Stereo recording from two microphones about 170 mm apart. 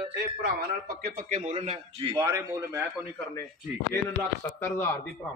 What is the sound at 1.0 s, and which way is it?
Speech, 60° right (ahead or behind).